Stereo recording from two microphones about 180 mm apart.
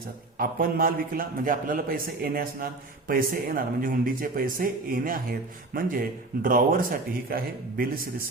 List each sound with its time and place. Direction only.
0.3 s a man's voice: 55° right (ahead or behind)